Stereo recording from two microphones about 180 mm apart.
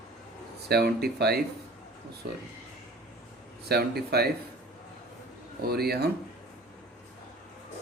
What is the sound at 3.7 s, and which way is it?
Speech, 60° right (ahead or behind).